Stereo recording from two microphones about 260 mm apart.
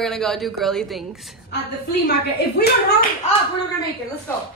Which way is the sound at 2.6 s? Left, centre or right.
Left.